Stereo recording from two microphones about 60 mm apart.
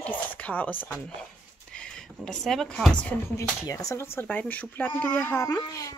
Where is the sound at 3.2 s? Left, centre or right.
Left.